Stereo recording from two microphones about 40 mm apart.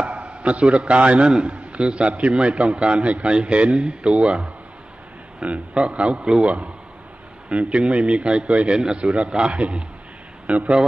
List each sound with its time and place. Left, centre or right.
0.0 s a man's voice: right